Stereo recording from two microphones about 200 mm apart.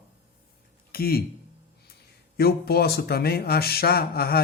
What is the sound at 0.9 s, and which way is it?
Speech, 50° left (ahead or behind).